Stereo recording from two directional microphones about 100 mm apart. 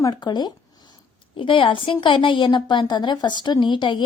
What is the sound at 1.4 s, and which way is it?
A woman's voice, 60° left (ahead or behind).